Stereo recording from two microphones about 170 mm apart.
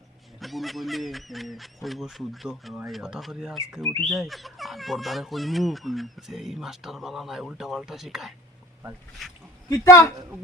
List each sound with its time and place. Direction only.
0.3 s speech: centre (ahead or behind)
9.6 s speech: 15° left (ahead or behind)